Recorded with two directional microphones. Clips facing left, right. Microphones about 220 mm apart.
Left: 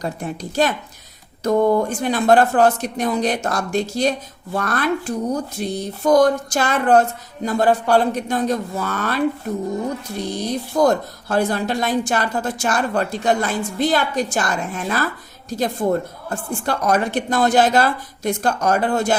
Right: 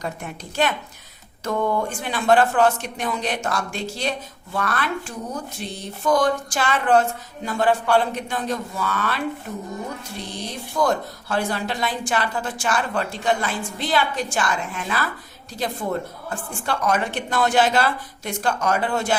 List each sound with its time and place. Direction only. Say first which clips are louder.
0.0 s a woman's voice: left 5 dB; 35° left (ahead or behind)
10.4 s a woman's voice: left 5 dB; 40° left (ahead or behind)